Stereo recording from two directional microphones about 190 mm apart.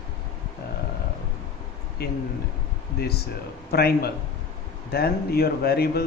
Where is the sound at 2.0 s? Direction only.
60° left (ahead or behind).